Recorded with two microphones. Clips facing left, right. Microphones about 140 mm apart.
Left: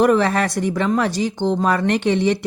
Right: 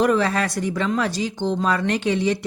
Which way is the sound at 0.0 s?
55° left (ahead or behind).